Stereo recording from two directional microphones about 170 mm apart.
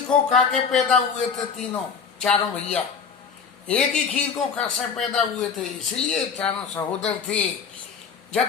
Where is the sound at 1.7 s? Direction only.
5° left (ahead or behind).